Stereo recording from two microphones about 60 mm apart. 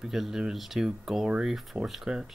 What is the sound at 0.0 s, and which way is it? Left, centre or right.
Speech, centre.